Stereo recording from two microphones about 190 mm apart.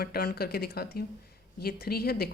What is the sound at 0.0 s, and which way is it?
Speech, 55° left (ahead or behind).